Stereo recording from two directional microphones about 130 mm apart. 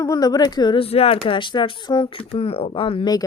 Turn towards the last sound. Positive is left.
turn(degrees=35)  # may be behind; listen again after turning